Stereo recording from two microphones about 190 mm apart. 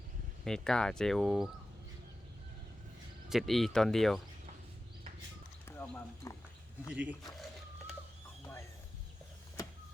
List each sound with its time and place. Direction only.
0.4 s speech: 5° left (ahead or behind)
3.2 s speech: centre (ahead or behind)
5.6 s speech: 10° left (ahead or behind)
6.9 s speech: 5° right (ahead or behind)